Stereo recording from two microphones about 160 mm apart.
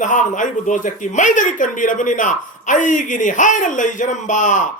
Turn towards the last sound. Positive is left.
turn(degrees=50)  # may be behind; listen again after turning